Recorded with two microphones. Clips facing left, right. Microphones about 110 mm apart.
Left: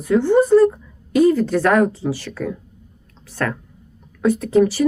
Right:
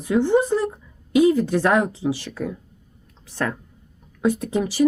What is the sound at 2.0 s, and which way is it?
Speech, 15° right (ahead or behind).